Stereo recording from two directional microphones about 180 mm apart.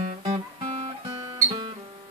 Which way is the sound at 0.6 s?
35° right (ahead or behind).